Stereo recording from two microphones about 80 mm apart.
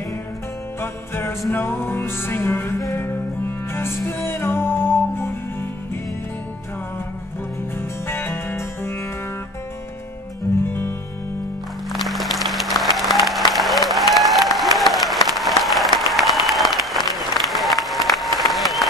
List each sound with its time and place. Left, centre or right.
0.7 s music: left
8.1 s music: left
10.7 s music: left
11.9 s music: centre
13.5 s applause: centre